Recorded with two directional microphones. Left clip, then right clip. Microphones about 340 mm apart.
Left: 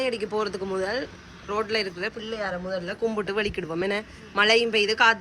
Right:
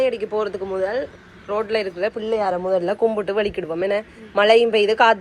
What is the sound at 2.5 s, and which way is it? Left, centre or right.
Speech, right.